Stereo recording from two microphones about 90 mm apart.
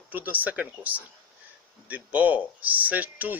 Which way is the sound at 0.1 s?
20° right (ahead or behind).